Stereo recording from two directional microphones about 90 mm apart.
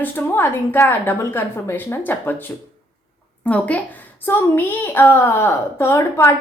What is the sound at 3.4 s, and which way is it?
A woman's voice, 15° left (ahead or behind).